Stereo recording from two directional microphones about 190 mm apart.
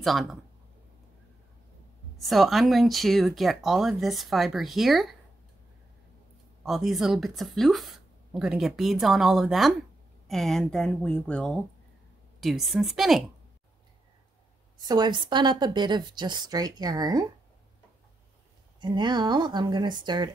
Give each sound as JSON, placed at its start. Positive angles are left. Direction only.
{"t": 0.0, "sound": "speech", "side_deg": 0}
{"t": 2.1, "sound": "speech", "side_deg": 0}
{"t": 6.6, "sound": "speech", "side_deg": 0}
{"t": 14.8, "sound": "speech", "side_deg": -20}
{"t": 18.8, "sound": "speech", "side_deg": -25}